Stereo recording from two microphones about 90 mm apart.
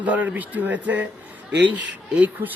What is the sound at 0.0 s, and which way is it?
Speech, 15° right (ahead or behind).